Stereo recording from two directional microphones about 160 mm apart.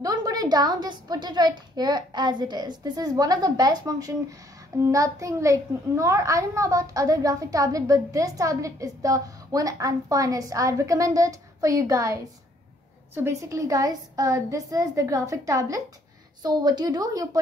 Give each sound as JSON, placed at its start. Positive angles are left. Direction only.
{"t": 0.0, "sound": "a child's voice", "side_deg": -25}